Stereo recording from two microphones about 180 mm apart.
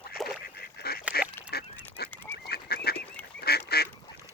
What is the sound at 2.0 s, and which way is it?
Goose, 60° left (ahead or behind).